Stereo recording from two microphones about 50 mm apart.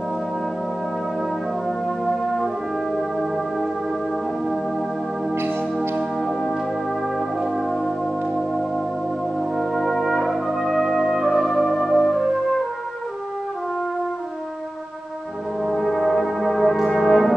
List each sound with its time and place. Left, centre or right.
2.0 s brass instrument: centre
7.2 s music: centre
9.6 s brass instrument: centre
15.6 s brass instrument: centre